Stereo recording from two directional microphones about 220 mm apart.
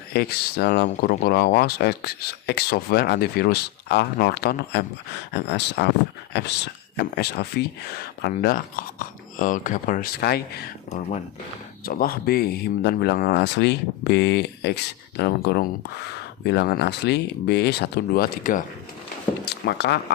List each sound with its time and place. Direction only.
0.1 s speech: 45° left (ahead or behind)
6.9 s speech: 45° left (ahead or behind)